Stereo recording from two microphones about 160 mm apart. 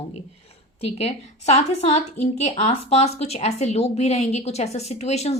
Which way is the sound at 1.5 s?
40° left (ahead or behind).